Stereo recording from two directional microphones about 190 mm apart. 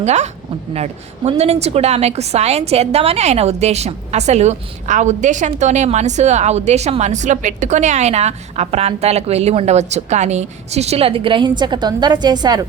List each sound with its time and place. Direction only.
0.0 s a woman's voice: 35° right (ahead or behind); by 12.6 s 20° right (ahead or behind)